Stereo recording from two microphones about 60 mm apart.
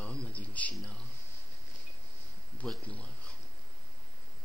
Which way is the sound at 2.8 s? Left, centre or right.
Left.